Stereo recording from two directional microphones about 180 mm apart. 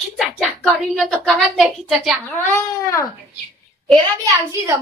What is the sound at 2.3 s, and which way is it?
Speech, 15° left (ahead or behind).